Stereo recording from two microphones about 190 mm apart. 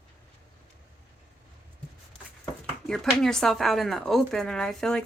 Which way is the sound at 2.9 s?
Centre (ahead or behind).